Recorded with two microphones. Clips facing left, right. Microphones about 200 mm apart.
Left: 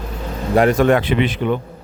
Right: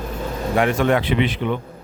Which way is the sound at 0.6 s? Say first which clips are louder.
Left 5 dB; 40° left (ahead or behind).